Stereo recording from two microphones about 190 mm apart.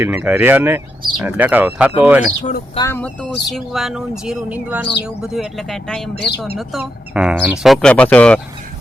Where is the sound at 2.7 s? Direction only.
15° left (ahead or behind).